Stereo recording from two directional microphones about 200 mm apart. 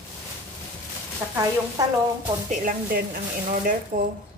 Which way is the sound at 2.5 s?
45° right (ahead or behind).